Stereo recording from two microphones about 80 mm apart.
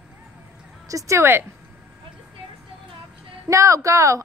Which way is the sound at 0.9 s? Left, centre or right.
Right.